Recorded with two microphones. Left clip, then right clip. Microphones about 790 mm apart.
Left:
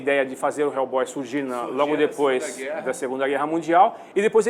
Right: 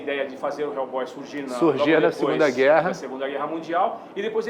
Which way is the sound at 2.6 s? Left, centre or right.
Right.